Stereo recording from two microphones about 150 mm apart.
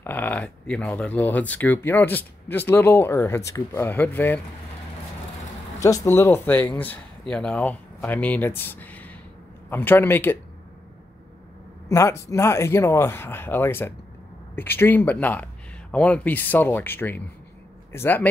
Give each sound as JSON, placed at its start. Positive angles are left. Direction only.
{"t": 0.0, "sound": "speech", "side_deg": 10}
{"t": 6.0, "sound": "speech", "side_deg": 15}
{"t": 11.9, "sound": "speech", "side_deg": 20}